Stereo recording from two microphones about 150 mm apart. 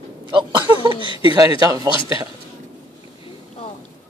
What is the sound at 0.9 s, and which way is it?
Chuckle, 35° left (ahead or behind).